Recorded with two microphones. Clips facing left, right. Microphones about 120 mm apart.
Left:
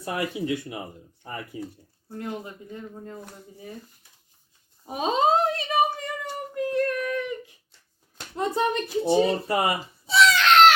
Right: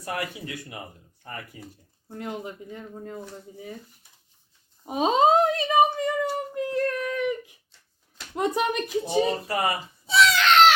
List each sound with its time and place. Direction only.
0.0 s speech: 25° left (ahead or behind)
2.0 s speech: 20° right (ahead or behind)
4.9 s speech: 25° right (ahead or behind)
6.5 s a sound: 25° right (ahead or behind)
8.4 s speech: 15° right (ahead or behind)
9.0 s speech: 25° left (ahead or behind)
10.1 s a sound: centre (ahead or behind)